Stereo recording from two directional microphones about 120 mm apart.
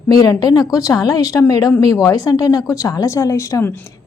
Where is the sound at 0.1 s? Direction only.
35° left (ahead or behind).